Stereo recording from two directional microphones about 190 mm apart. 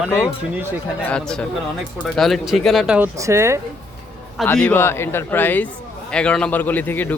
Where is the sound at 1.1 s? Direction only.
5° left (ahead or behind); by 3.6 s 15° right (ahead or behind).